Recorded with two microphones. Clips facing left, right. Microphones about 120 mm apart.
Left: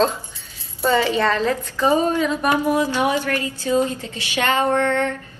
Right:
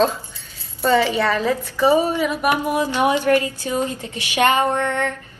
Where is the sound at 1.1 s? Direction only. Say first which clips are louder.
Even; 10° right (ahead or behind).